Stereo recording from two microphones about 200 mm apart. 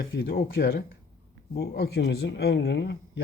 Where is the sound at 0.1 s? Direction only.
60° left (ahead or behind).